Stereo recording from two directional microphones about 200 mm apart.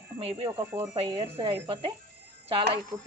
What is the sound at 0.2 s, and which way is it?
Speech, 30° right (ahead or behind).